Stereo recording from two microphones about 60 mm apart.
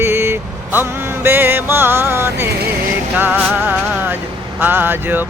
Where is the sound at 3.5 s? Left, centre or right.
Right.